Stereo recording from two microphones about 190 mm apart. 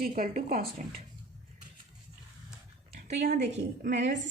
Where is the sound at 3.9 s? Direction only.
40° right (ahead or behind).